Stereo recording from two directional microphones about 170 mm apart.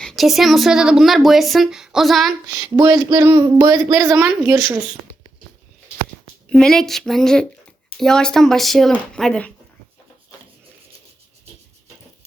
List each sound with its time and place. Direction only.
0.0 s speech: centre (ahead or behind)
2.6 s speech: 25° right (ahead or behind)
6.5 s speech: 5° left (ahead or behind)